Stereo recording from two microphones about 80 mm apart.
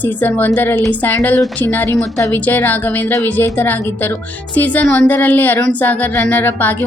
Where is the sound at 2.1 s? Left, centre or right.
Left.